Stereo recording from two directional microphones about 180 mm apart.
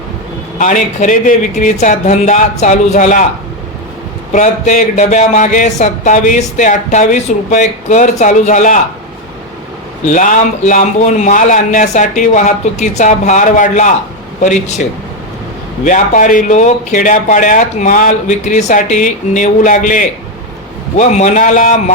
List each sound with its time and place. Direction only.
0.6 s speech: 45° left (ahead or behind)
4.3 s speech: 40° left (ahead or behind)
10.1 s speech: 45° left (ahead or behind)
15.8 s speech: 45° left (ahead or behind)